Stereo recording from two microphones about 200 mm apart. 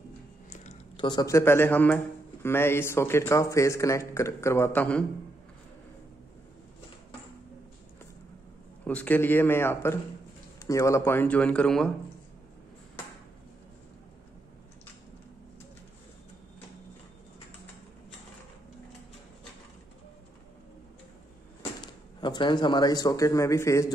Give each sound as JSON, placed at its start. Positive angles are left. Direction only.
{"t": 0.5, "sound": "a sound", "side_deg": 35}
{"t": 1.0, "sound": "a man's voice", "side_deg": 20}
{"t": 8.8, "sound": "a man's voice", "side_deg": 10}
{"t": 21.8, "sound": "speech", "side_deg": 20}